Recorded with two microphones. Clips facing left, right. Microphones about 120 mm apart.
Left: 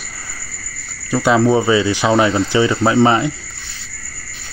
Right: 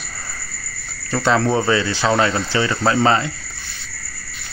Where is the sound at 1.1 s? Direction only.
10° left (ahead or behind).